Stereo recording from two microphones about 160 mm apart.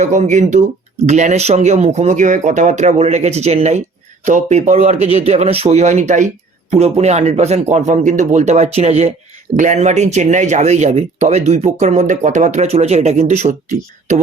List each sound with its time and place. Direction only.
0.0 s speech: 45° right (ahead or behind)